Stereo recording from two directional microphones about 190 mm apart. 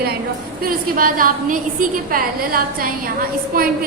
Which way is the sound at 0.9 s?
45° right (ahead or behind).